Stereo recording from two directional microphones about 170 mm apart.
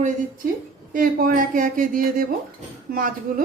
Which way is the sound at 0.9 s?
55° right (ahead or behind).